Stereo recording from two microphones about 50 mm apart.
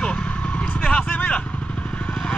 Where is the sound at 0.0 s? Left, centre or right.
Left.